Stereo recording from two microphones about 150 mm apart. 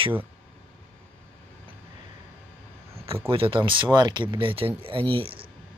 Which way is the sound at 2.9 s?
40° right (ahead or behind).